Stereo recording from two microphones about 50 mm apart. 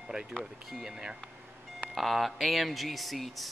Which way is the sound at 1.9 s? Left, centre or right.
Centre.